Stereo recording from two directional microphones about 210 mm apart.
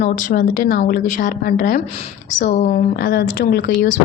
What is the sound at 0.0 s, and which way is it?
A woman's voice, 40° left (ahead or behind).